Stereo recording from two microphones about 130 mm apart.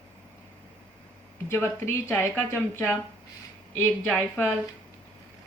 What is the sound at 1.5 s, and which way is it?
Speech, 20° left (ahead or behind).